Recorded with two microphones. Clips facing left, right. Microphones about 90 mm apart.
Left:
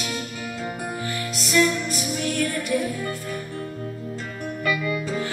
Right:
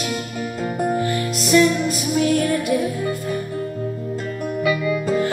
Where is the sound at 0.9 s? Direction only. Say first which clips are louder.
Right 8 dB; 40° right (ahead or behind).